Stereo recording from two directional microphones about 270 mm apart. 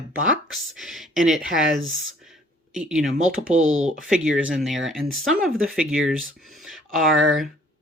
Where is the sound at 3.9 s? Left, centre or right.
Centre.